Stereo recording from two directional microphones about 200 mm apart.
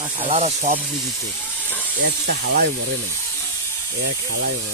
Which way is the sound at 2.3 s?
55° right (ahead or behind).